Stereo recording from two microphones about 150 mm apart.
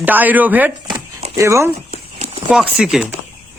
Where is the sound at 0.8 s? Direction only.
30° right (ahead or behind).